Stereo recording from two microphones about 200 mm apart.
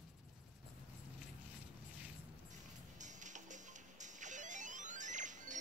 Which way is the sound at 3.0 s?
40° right (ahead or behind).